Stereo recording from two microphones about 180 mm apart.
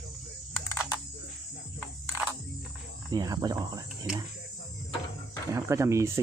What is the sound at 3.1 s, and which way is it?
Speech, 20° right (ahead or behind).